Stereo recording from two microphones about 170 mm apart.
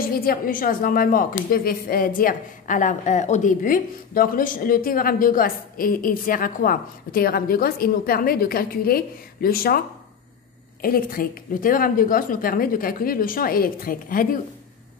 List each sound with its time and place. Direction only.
0.0 s a woman's voice: 60° left (ahead or behind)